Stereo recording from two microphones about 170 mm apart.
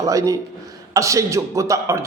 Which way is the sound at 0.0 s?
20° right (ahead or behind).